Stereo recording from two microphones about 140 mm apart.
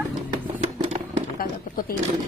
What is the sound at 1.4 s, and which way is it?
Speech, 90° left.